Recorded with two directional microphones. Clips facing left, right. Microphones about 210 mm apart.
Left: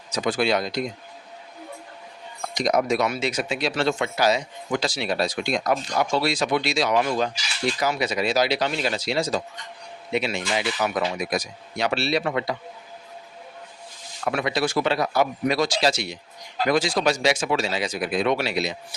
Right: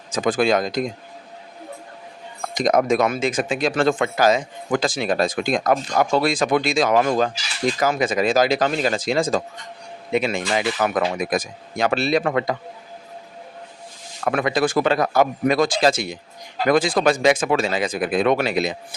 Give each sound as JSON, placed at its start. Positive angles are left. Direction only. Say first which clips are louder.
{"t": 0.1, "sound": "speech", "louder": "right 4 dB", "side_deg": -50}
{"t": 2.6, "sound": "speech", "louder": "right 4 dB", "side_deg": -50}
{"t": 14.3, "sound": "speech", "louder": "right 4 dB", "side_deg": -50}